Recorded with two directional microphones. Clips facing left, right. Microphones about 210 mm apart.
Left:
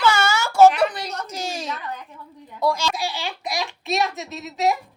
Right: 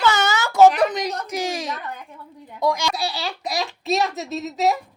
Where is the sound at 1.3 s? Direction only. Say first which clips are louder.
Right 3 dB; 15° right (ahead or behind).